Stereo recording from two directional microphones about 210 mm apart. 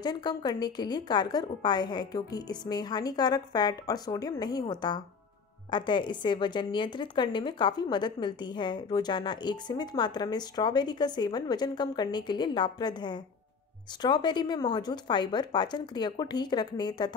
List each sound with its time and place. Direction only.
0.0 s a woman's voice: 20° left (ahead or behind)